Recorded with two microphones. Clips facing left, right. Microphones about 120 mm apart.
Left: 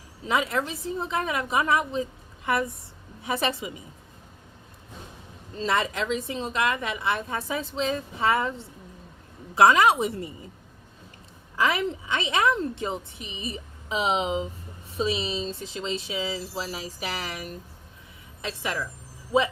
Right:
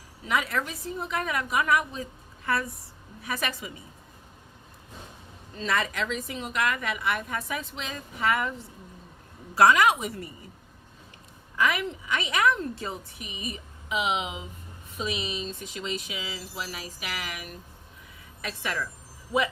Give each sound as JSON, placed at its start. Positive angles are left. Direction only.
{"t": 0.3, "sound": "a woman's voice", "side_deg": 25}
{"t": 5.5, "sound": "a woman's voice", "side_deg": 25}
{"t": 11.5, "sound": "a woman's voice", "side_deg": 30}
{"t": 18.4, "sound": "a woman's voice", "side_deg": 20}